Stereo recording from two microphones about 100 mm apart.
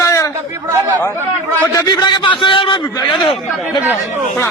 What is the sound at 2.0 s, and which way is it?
Speech, 50° left (ahead or behind).